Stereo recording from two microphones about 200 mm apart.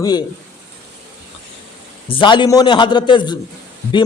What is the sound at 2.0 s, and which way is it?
A man's voice, 25° left (ahead or behind).